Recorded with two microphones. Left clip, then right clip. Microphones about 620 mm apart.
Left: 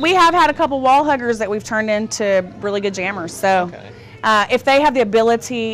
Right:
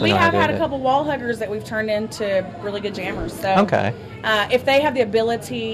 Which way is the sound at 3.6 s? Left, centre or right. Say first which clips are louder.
Right 14 dB; right.